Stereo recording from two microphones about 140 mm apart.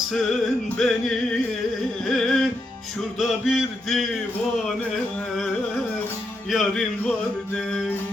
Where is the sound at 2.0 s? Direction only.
5° left (ahead or behind).